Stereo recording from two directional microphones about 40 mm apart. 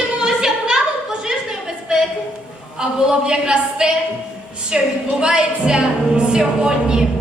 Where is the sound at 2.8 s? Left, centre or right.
Centre.